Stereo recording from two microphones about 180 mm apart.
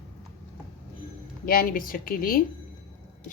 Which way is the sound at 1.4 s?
50° left (ahead or behind).